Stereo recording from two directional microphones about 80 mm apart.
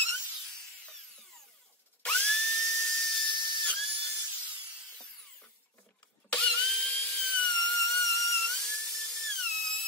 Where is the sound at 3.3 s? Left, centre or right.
Left.